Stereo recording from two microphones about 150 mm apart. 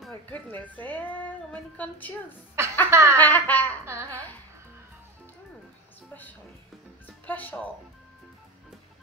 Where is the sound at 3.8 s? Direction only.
15° right (ahead or behind).